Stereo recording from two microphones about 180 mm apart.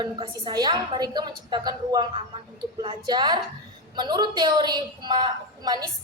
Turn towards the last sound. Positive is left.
turn(degrees=-20)  # may be behind; listen again after turning